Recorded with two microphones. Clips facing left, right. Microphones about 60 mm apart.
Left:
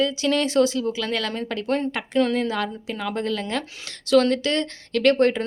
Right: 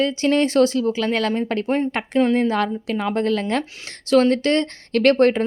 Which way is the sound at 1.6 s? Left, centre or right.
Right.